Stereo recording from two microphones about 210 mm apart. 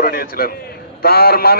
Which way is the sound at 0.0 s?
45° left (ahead or behind).